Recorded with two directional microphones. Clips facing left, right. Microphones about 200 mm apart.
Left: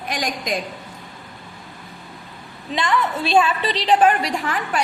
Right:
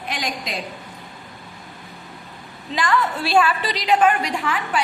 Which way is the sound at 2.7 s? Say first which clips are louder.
Even; 20° left (ahead or behind).